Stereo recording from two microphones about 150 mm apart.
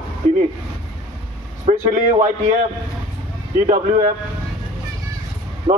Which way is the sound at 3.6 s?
50° right (ahead or behind).